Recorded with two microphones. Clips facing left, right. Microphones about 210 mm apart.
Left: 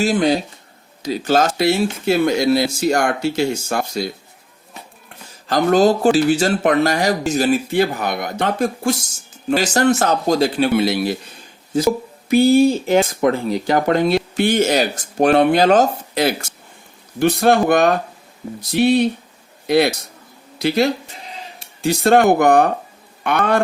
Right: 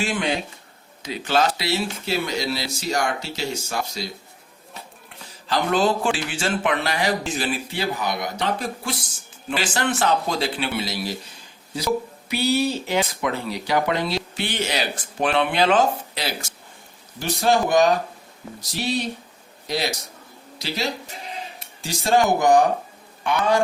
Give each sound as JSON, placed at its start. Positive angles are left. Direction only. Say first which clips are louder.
{"t": 0.0, "sound": "speech", "louder": "left 8 dB", "side_deg": 40}
{"t": 5.5, "sound": "speech", "louder": "left 7 dB", "side_deg": 40}
{"t": 10.8, "sound": "speech", "louder": "left 10 dB", "side_deg": 60}
{"t": 12.3, "sound": "a man's voice", "louder": "left 10 dB", "side_deg": 50}